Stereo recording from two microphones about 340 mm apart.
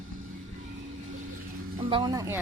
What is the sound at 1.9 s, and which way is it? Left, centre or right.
Speech, centre.